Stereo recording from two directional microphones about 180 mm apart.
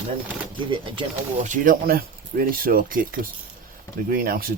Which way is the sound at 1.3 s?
45° right (ahead or behind).